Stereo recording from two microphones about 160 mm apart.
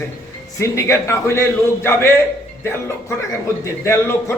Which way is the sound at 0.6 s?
15° left (ahead or behind).